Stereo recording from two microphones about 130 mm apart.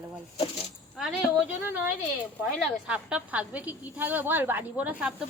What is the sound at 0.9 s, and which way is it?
Speech, centre (ahead or behind).